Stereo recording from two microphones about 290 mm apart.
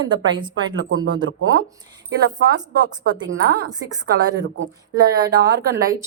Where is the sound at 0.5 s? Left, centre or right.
Right.